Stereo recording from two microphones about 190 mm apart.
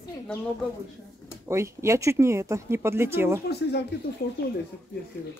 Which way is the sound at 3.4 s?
60° left (ahead or behind).